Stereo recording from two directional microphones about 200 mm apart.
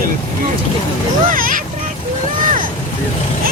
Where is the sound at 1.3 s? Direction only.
45° right (ahead or behind).